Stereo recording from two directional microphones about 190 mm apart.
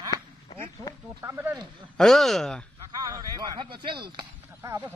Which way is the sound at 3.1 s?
20° right (ahead or behind).